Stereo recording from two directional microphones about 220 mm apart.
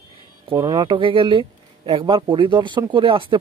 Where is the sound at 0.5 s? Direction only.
15° right (ahead or behind).